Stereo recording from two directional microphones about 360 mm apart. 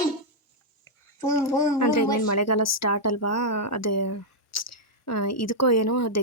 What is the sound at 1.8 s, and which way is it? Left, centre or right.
Speech, left.